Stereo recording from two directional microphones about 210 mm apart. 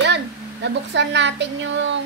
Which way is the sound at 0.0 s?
55° right (ahead or behind).